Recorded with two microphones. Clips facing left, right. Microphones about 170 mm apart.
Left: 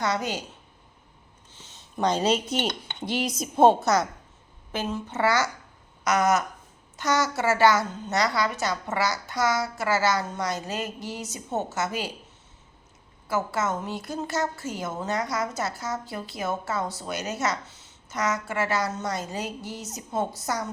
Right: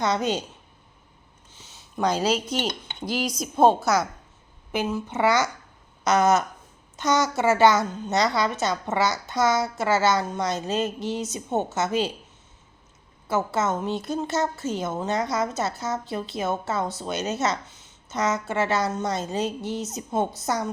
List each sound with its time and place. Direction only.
0.0 s a woman's voice: 20° right (ahead or behind)
1.5 s a woman's voice: 10° right (ahead or behind)
4.7 s a woman's voice: 15° right (ahead or behind)
13.2 s a woman's voice: 25° right (ahead or behind)